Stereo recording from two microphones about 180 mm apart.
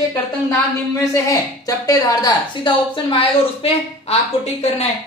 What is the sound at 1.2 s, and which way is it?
A woman's voice, 20° left (ahead or behind).